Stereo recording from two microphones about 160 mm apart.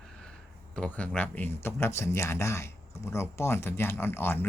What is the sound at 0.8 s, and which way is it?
Speech, 10° left (ahead or behind).